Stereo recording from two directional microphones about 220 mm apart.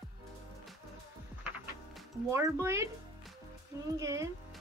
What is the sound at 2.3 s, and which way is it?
Speech, 15° right (ahead or behind).